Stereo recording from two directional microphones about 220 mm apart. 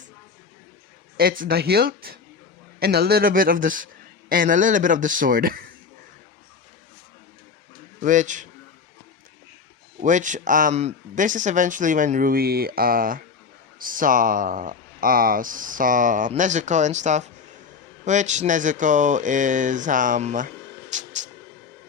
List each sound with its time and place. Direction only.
1.1 s speech: 40° right (ahead or behind)
8.0 s speech: 35° right (ahead or behind)
10.0 s speech: 35° right (ahead or behind)
20.9 s a sound: 35° right (ahead or behind)